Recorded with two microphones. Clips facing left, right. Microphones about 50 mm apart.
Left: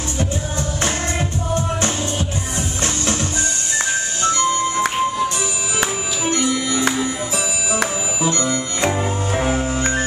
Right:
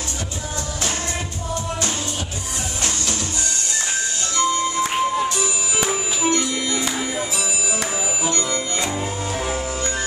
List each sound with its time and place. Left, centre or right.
3.7 s music: left
6.3 s music: left
8.2 s music: left